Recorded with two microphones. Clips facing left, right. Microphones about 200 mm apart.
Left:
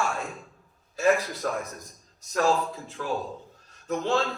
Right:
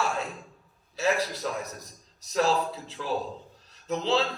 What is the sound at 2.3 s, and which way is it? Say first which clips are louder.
Speech: left 1 dB; 50° left (ahead or behind).